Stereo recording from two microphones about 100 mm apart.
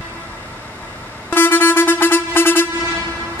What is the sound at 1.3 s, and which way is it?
Vehicle, 20° left (ahead or behind).